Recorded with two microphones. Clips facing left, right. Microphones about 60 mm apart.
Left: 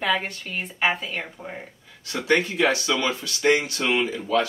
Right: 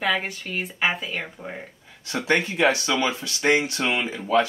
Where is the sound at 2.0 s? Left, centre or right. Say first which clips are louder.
Left 1 dB; right.